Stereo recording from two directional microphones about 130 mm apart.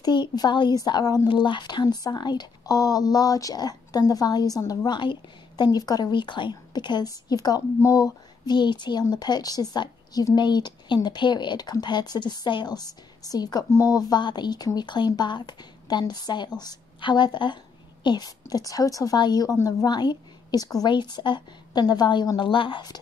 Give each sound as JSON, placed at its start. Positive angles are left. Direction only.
{"t": 0.0, "sound": "speech", "side_deg": 35}